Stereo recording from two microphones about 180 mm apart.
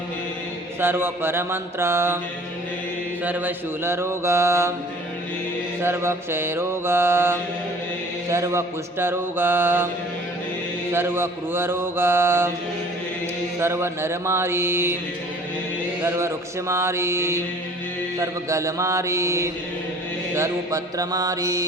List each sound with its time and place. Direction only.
0.8 s mantra: 10° right (ahead or behind)
3.2 s mantra: 10° right (ahead or behind)
5.8 s mantra: 15° right (ahead or behind)
10.9 s mantra: 15° right (ahead or behind)
13.6 s mantra: 15° right (ahead or behind)
16.0 s mantra: 15° right (ahead or behind)